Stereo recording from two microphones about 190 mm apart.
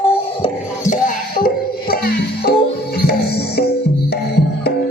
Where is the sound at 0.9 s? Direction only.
45° left (ahead or behind).